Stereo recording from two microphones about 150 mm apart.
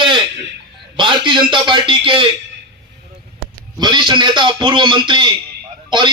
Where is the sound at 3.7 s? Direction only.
30° right (ahead or behind).